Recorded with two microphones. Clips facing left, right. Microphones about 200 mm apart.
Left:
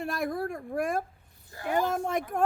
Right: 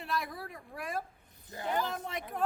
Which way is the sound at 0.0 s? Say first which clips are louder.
Left 7 dB; 45° left (ahead or behind).